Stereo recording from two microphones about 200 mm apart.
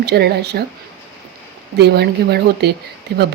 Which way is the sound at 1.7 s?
55° right (ahead or behind).